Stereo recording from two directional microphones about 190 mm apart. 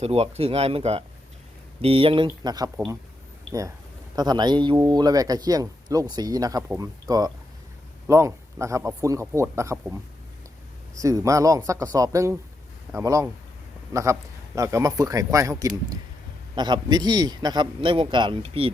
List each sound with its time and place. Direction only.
0.0 s a man's voice: 35° right (ahead or behind)
4.1 s a man's voice: 20° right (ahead or behind)
11.0 s a man's voice: 15° right (ahead or behind)